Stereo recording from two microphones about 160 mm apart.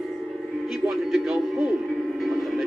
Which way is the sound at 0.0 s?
Centre (ahead or behind).